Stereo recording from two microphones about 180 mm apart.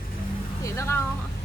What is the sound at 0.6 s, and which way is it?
Speech, 15° left (ahead or behind).